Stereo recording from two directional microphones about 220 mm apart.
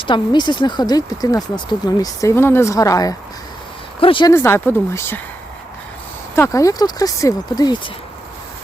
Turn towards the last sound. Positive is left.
turn(degrees=20)  # may be behind; listen again after turning